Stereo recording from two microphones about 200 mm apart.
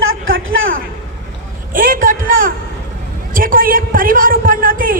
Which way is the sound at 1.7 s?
45° right (ahead or behind).